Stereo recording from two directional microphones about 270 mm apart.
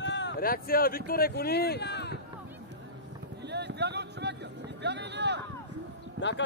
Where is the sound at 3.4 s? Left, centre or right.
Right.